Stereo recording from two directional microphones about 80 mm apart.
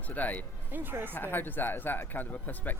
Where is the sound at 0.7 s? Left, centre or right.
Right.